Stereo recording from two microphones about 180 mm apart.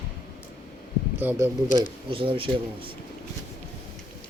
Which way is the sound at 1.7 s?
45° left (ahead or behind).